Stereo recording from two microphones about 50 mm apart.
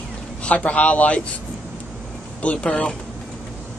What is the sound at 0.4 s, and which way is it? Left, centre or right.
Speech, left.